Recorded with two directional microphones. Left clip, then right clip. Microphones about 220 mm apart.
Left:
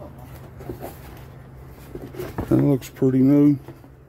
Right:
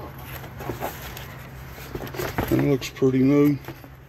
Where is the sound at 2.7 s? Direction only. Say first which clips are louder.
Even; 30° left (ahead or behind).